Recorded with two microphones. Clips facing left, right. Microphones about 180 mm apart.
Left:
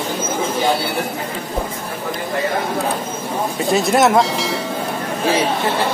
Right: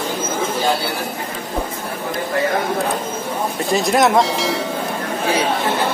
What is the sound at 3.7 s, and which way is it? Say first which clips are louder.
Speech: left 1 dB; centre (ahead or behind).